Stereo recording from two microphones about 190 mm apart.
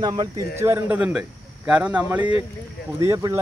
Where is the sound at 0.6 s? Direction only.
10° right (ahead or behind).